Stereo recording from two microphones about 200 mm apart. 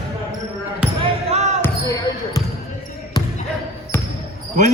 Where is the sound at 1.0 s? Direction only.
30° right (ahead or behind).